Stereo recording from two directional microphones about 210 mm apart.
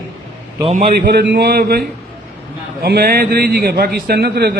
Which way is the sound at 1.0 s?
55° right (ahead or behind).